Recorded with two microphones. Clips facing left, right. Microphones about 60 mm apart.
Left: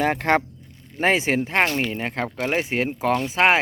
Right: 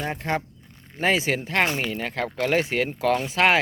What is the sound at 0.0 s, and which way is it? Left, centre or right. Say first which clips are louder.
Speech: left 7 dB; left.